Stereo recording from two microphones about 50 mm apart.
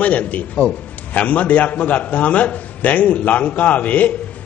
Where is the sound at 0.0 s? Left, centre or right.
Left.